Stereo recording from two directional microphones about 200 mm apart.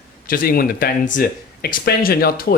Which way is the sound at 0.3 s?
45° left (ahead or behind).